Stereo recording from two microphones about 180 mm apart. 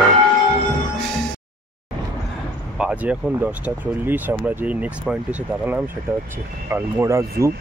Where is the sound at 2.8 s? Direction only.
5° right (ahead or behind).